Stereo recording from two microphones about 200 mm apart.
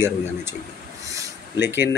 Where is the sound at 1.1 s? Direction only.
15° right (ahead or behind).